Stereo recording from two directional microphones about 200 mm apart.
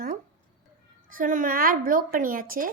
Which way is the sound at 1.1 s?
40° right (ahead or behind).